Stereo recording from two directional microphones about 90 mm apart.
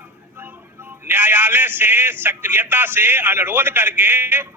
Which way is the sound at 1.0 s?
25° right (ahead or behind).